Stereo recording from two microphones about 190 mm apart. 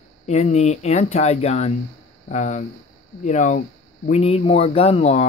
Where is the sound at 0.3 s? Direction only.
35° left (ahead or behind).